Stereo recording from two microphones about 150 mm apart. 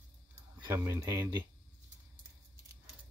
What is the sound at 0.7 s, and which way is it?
Speech, 20° right (ahead or behind).